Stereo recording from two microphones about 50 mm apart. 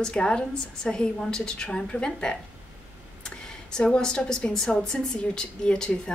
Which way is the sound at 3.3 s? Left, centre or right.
Left.